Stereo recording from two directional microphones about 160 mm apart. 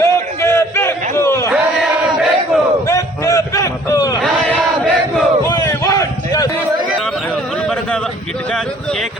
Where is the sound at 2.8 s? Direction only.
20° left (ahead or behind).